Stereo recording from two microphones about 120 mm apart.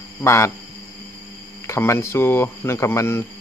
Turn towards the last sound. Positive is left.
turn(degrees=20)  # may be behind; listen again after turning